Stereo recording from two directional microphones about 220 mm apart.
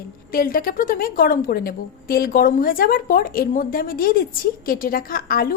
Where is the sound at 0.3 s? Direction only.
40° left (ahead or behind).